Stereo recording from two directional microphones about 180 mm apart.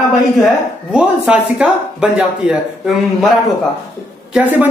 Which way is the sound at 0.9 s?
5° right (ahead or behind).